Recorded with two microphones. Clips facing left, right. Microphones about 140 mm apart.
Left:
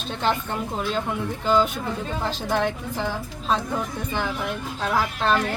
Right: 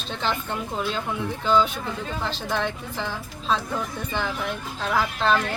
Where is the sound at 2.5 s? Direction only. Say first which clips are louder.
Left 4 dB; 50° left (ahead or behind).